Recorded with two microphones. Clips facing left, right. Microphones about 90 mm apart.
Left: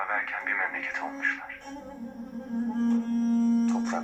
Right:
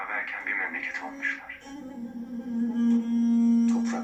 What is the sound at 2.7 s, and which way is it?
Music, 30° left (ahead or behind).